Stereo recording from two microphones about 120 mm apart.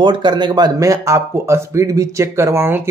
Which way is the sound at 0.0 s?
40° right (ahead or behind).